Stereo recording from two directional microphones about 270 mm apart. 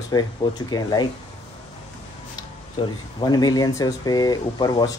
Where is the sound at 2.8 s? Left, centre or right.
Centre.